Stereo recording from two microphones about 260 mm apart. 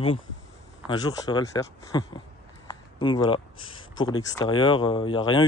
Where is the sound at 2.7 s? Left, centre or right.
Centre.